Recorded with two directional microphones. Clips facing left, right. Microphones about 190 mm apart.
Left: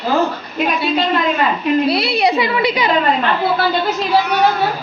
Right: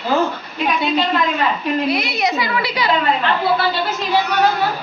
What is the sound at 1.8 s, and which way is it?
A woman's voice, 35° left (ahead or behind).